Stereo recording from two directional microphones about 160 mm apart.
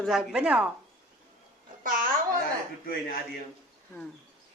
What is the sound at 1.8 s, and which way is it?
Babbling, 60° right (ahead or behind).